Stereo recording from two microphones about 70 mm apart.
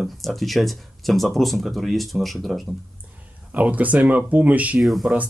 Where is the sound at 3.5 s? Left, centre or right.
Right.